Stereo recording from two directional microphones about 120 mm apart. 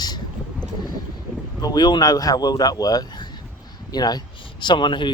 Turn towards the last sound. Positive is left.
turn(degrees=40)  # may be behind; listen again after turning